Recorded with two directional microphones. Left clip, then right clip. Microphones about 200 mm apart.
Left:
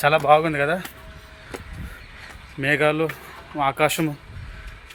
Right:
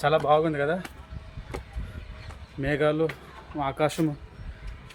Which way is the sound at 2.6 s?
10° left (ahead or behind).